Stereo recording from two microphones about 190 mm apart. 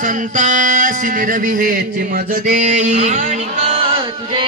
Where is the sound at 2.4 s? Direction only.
40° right (ahead or behind).